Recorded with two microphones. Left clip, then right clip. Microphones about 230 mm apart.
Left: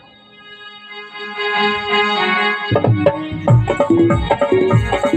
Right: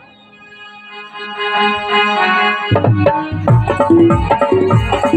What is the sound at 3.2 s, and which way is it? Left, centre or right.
Tabla, right.